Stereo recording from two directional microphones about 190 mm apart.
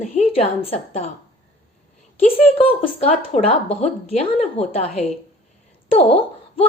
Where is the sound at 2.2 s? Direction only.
30° left (ahead or behind).